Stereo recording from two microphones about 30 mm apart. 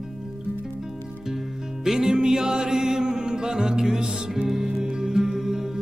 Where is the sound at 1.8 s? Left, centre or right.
Centre.